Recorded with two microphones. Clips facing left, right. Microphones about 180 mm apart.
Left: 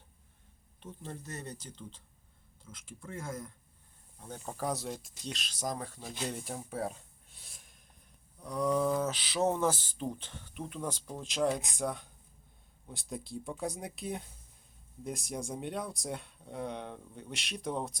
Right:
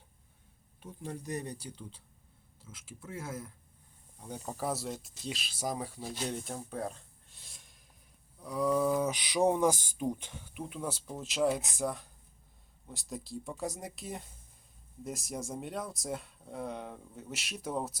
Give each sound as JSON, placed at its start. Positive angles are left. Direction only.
{"t": 0.8, "sound": "speech", "side_deg": -10}